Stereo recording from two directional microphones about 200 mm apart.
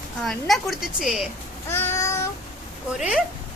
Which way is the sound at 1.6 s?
10° left (ahead or behind).